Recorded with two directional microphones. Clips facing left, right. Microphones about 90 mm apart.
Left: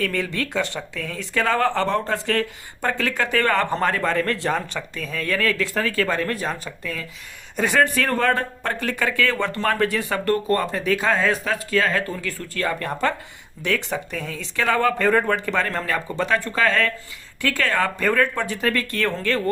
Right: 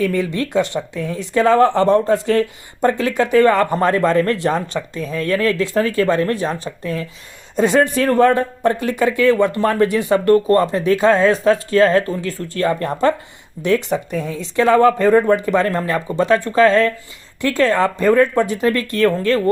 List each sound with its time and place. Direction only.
0.0 s speech: 15° right (ahead or behind)